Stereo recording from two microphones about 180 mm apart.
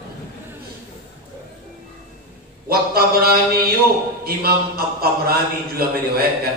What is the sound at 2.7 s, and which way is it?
Mantra, 60° right (ahead or behind).